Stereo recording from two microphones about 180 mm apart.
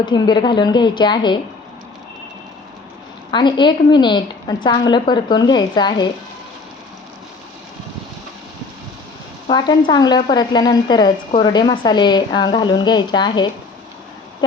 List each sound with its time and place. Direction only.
0.0 s a woman's voice: 25° left (ahead or behind)
3.3 s a woman's voice: 25° left (ahead or behind)
9.5 s a woman's voice: 25° left (ahead or behind)